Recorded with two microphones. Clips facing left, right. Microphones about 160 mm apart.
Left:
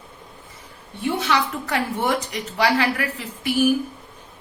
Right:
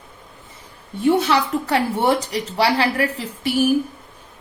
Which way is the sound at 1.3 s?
35° right (ahead or behind).